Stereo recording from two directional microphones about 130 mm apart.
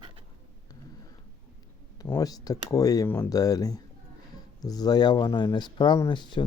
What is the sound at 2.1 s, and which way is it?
Speech, 30° left (ahead or behind).